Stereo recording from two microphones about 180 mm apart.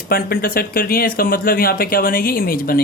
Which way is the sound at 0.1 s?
55° left (ahead or behind).